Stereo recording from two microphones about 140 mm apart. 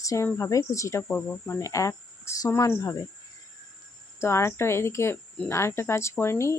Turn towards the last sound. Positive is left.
turn(degrees=20)  # may be behind; listen again after turning